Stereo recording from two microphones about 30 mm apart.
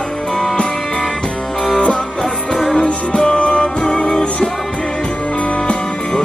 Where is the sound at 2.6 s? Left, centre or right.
Left.